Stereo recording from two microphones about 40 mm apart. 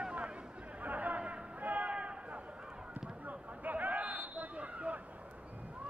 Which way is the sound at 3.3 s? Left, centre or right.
Right.